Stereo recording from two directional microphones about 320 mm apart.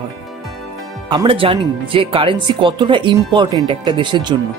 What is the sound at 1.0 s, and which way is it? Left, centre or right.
Speech, centre.